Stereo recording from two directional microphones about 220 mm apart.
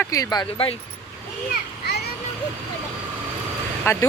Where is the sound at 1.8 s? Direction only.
45° left (ahead or behind).